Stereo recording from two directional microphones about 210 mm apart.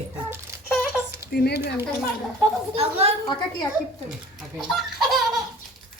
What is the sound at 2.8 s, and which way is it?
Speech, 30° right (ahead or behind).